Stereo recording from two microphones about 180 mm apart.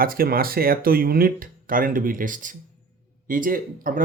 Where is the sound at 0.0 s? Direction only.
55° right (ahead or behind).